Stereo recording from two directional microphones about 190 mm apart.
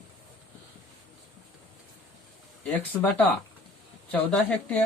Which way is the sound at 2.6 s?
10° left (ahead or behind).